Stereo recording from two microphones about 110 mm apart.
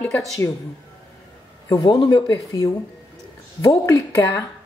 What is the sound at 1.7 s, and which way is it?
Speech, 45° left (ahead or behind).